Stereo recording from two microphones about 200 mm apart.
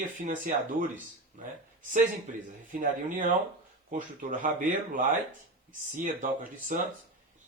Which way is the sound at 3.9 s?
40° right (ahead or behind).